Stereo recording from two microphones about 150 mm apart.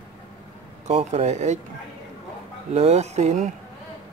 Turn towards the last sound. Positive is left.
turn(degrees=-50)  # may be behind; listen again after turning